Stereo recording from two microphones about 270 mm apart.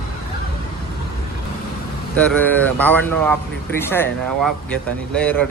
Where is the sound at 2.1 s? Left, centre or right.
Centre.